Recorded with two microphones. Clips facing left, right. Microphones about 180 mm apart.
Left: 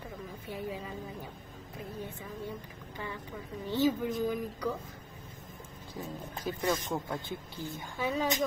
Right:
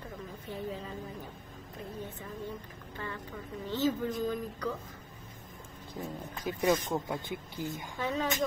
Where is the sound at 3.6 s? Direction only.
15° left (ahead or behind).